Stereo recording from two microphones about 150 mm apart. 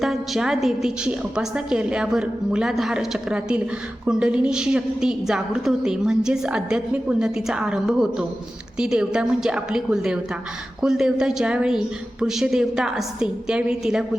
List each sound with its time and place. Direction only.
0.0 s a woman's voice: 5° right (ahead or behind)